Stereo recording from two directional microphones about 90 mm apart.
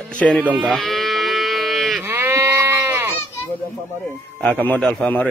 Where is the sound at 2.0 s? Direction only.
25° right (ahead or behind).